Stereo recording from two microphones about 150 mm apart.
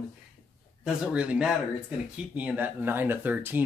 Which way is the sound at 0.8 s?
5° right (ahead or behind).